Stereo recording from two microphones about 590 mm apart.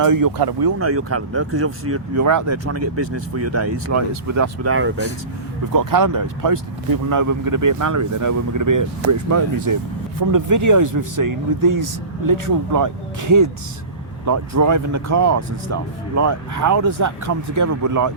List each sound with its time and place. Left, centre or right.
0.0 s speech: right
0.8 s speech: right
5.7 s speech: right